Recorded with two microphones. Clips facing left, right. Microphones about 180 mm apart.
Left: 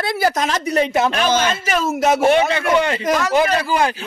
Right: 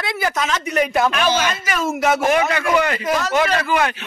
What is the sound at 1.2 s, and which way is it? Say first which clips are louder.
Speech: left 2 dB; 40° left (ahead or behind).